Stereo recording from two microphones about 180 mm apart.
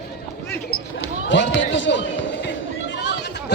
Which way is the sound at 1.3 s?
90° left.